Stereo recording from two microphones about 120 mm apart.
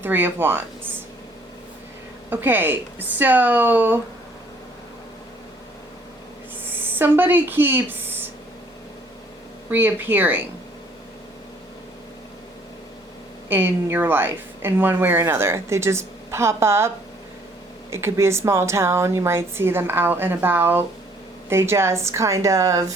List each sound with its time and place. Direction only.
0.0 s speech: 15° right (ahead or behind)
2.3 s speech: 15° right (ahead or behind)
6.7 s speech: 15° right (ahead or behind)
9.6 s speech: 15° right (ahead or behind)
13.5 s a woman's voice: 20° right (ahead or behind)
17.9 s a woman's voice: 20° right (ahead or behind)